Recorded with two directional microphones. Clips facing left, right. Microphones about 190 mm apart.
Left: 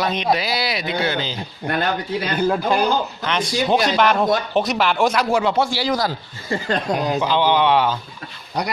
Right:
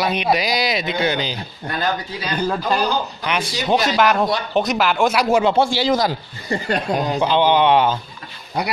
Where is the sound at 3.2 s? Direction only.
10° right (ahead or behind).